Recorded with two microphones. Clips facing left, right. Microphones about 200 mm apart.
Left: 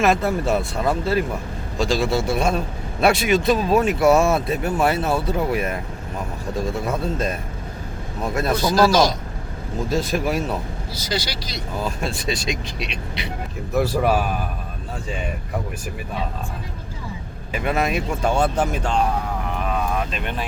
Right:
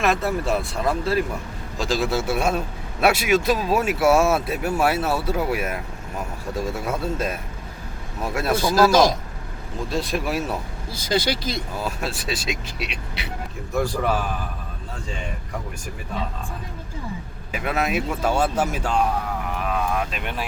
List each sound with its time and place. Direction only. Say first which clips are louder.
0.0 s speech: left 3 dB; centre (ahead or behind)
9.9 s speech: left 3 dB; centre (ahead or behind)
10.9 s speech: right 5 dB; 50° right (ahead or behind)
11.8 s speech: left 2 dB; 5° right (ahead or behind)
13.7 s speech: left 4 dB; 5° left (ahead or behind)
17.5 s speech: left 2 dB; centre (ahead or behind)
19.5 s vehicle: even; centre (ahead or behind)